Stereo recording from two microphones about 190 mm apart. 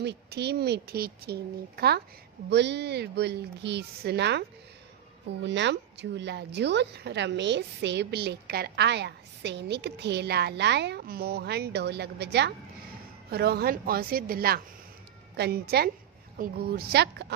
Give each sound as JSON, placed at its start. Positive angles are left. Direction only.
{"t": 0.0, "sound": "a woman's voice", "side_deg": -60}